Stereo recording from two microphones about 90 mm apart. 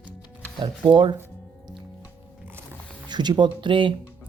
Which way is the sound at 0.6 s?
65° right (ahead or behind).